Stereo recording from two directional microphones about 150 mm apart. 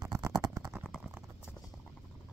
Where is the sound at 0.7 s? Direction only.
Centre (ahead or behind).